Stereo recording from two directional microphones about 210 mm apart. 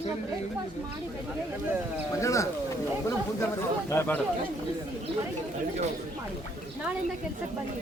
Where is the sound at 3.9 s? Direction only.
10° left (ahead or behind).